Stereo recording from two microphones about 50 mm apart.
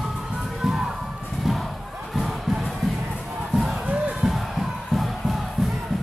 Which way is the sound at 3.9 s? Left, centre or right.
Centre.